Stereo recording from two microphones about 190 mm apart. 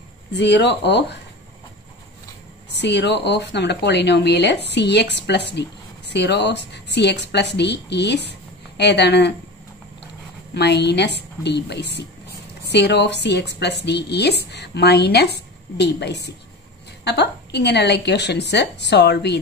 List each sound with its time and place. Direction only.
0.3 s a woman's voice: 65° left (ahead or behind)
2.7 s a woman's voice: 65° left (ahead or behind)
10.5 s a woman's voice: 60° left (ahead or behind)